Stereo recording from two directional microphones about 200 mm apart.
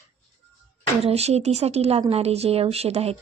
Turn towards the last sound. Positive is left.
turn(degrees=-30)  # may be behind; listen again after turning